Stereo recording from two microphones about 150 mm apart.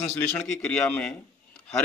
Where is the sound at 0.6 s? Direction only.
5° left (ahead or behind).